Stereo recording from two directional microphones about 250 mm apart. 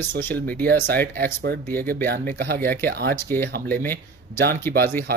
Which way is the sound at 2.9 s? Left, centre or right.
Right.